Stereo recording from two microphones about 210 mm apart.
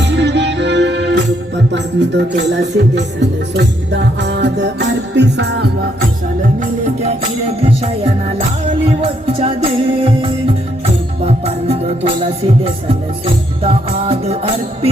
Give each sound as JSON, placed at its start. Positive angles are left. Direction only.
{"t": 0.0, "sound": "music", "side_deg": -55}
{"t": 6.6, "sound": "music", "side_deg": -30}